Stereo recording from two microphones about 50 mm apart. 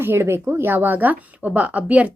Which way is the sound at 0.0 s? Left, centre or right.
Right.